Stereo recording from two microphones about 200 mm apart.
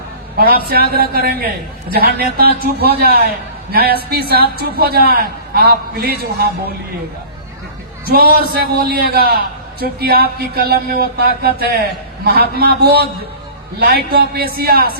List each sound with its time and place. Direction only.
0.3 s a man's voice: 50° right (ahead or behind)
8.0 s a man's voice: 50° right (ahead or behind)